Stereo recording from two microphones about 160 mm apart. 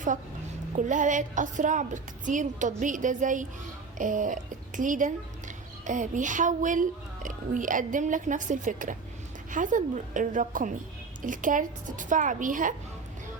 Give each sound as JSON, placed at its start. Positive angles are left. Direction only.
{"t": 0.8, "sound": "a woman's voice", "side_deg": -50}
{"t": 3.9, "sound": "a sound", "side_deg": -55}
{"t": 4.8, "sound": "a woman's voice", "side_deg": -55}